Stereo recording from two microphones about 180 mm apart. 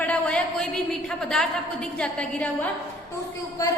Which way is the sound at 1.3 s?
5° left (ahead or behind).